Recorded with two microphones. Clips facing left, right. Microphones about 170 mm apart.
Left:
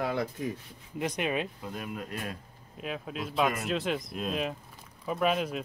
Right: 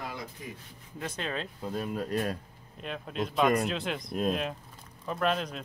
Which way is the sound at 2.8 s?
5° left (ahead or behind).